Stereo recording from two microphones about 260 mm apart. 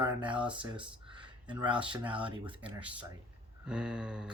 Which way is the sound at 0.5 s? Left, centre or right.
Centre.